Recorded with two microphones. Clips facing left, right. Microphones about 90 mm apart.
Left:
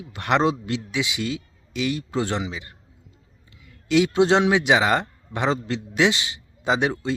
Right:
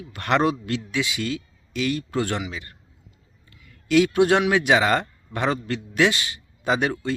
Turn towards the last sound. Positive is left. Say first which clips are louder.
# left 1 dB
turn(degrees=20)  # may be behind; listen again after turning